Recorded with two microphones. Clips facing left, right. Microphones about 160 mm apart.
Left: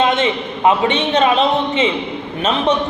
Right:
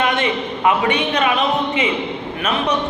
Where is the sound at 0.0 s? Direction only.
25° left (ahead or behind).